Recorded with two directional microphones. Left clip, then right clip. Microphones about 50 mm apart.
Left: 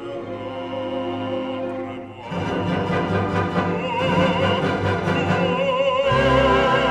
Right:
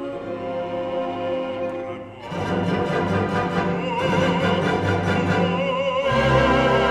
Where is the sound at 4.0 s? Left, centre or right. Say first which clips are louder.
Left 1 dB; centre.